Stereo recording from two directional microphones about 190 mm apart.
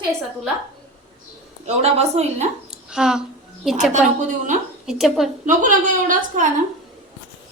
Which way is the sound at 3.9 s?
40° right (ahead or behind).